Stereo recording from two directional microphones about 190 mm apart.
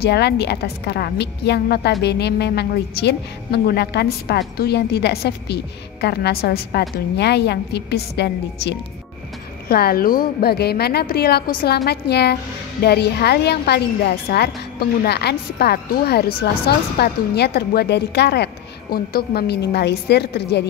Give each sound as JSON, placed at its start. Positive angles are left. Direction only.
{"t": 0.0, "sound": "a woman's voice", "side_deg": 60}